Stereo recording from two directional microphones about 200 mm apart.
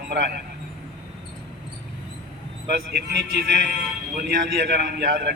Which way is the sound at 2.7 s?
55° right (ahead or behind).